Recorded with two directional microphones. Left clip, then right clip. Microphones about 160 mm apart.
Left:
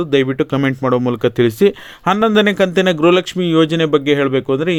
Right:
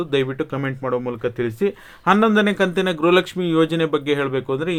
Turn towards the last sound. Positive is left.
turn(degrees=40)  # may be behind; listen again after turning